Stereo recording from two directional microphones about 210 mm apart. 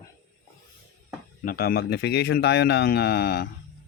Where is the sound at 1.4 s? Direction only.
45° left (ahead or behind).